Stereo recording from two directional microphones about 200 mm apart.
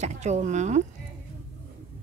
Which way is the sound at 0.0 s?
35° right (ahead or behind).